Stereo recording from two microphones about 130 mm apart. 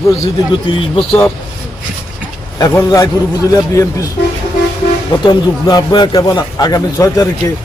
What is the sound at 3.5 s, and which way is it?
Speech, 25° left (ahead or behind).